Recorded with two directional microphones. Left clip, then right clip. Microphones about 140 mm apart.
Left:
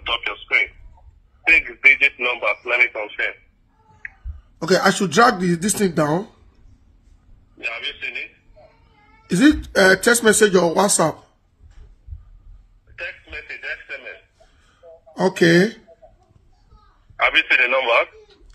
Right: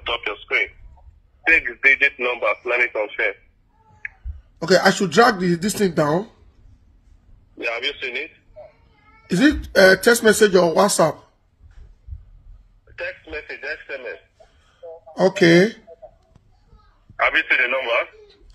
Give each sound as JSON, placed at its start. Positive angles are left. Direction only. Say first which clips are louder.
{"t": 0.2, "sound": "telephone", "louder": "left 2 dB", "side_deg": -5}
{"t": 1.4, "sound": "a man's voice", "louder": "left 2 dB", "side_deg": -10}
{"t": 2.7, "sound": "speech", "louder": "left 1 dB", "side_deg": -20}
{"t": 4.6, "sound": "speech", "louder": "right 1 dB", "side_deg": 20}
{"t": 7.6, "sound": "a man's voice", "louder": "right 2 dB", "side_deg": -50}
{"t": 9.3, "sound": "speech", "louder": "left 1 dB", "side_deg": 20}
{"t": 12.9, "sound": "radio", "louder": "right 2 dB", "side_deg": -50}
{"t": 13.8, "sound": "telephone", "louder": "right 2 dB", "side_deg": -45}
{"t": 15.1, "sound": "speech", "louder": "right 1 dB", "side_deg": 10}
{"t": 17.2, "sound": "speech", "louder": "left 2 dB", "side_deg": 5}